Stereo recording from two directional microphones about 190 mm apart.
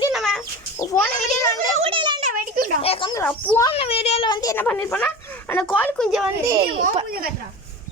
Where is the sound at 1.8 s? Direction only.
25° right (ahead or behind).